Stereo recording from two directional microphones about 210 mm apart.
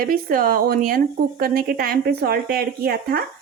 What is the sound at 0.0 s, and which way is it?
Speech, 45° right (ahead or behind).